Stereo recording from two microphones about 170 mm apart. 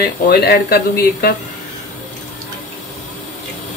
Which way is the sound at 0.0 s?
65° left (ahead or behind).